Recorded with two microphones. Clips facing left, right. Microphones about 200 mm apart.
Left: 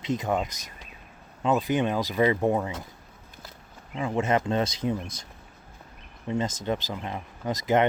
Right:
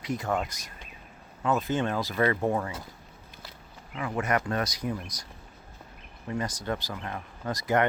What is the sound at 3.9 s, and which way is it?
Speech, 25° left (ahead or behind).